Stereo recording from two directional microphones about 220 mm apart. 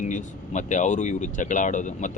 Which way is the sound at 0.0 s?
35° left (ahead or behind).